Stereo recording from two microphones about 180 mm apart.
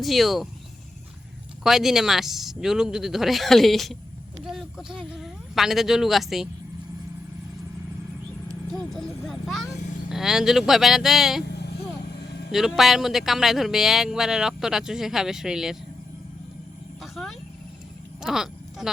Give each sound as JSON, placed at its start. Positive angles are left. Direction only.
{"t": 0.0, "sound": "speech", "side_deg": 0}
{"t": 1.6, "sound": "speech", "side_deg": 0}
{"t": 8.7, "sound": "speech", "side_deg": 0}
{"t": 11.4, "sound": "vehicle", "side_deg": 70}
{"t": 12.5, "sound": "speech", "side_deg": 0}
{"t": 17.0, "sound": "a sound", "side_deg": 0}